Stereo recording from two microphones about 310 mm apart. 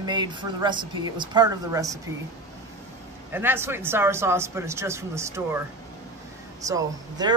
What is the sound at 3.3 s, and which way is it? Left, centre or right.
Speech, centre.